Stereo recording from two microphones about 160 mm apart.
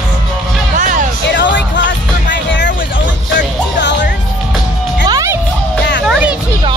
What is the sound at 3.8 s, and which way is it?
Music, 90° left.